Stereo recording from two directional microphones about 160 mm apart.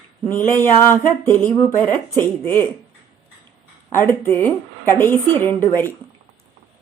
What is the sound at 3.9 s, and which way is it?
A woman's voice, 15° left (ahead or behind).